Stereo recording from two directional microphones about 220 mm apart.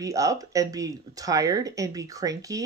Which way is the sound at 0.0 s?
15° right (ahead or behind).